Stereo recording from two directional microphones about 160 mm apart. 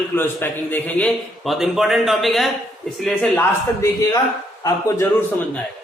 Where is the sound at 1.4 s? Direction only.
Centre (ahead or behind).